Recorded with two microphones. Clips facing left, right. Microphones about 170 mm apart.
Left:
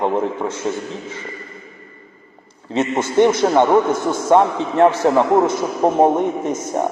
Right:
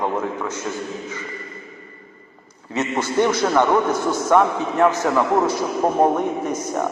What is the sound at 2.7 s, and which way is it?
A man's voice, 25° left (ahead or behind).